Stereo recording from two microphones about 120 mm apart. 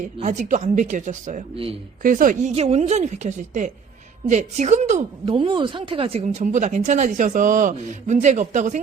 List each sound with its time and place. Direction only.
0.0 s a woman's voice: 90° right
5.2 s speech: 50° right (ahead or behind)
6.2 s speech: 85° right